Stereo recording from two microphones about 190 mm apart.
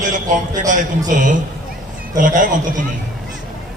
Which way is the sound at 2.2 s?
40° right (ahead or behind).